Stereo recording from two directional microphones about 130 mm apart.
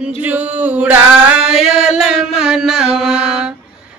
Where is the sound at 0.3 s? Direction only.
10° right (ahead or behind).